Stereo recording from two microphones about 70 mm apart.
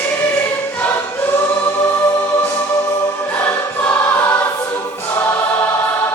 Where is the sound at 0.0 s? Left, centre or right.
Left.